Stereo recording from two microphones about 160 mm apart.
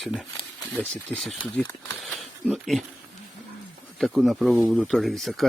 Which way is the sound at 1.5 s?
5° left (ahead or behind).